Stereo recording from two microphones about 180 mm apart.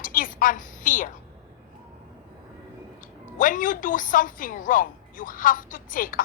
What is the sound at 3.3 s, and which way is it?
A woman's voice, 45° left (ahead or behind).